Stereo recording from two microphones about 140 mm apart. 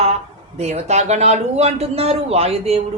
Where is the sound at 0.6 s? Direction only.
55° right (ahead or behind).